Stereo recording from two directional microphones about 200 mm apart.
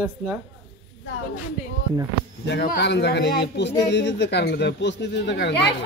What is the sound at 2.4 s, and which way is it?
A man's voice, 55° left (ahead or behind).